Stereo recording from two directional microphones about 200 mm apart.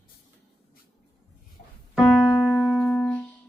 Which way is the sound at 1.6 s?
35° left (ahead or behind).